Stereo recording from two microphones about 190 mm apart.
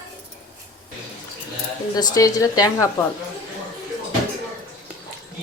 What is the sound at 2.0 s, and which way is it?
Speech, 20° left (ahead or behind).